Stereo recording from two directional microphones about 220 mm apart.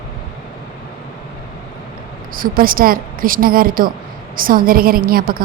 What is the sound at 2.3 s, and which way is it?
A woman's voice, 40° right (ahead or behind).